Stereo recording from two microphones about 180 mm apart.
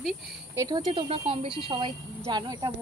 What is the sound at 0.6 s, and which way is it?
Speech, 25° right (ahead or behind).